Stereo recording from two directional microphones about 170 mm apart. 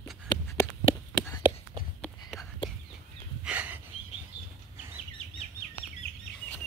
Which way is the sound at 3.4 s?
10° right (ahead or behind).